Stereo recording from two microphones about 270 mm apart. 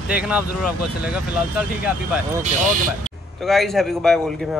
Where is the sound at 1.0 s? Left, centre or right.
Centre.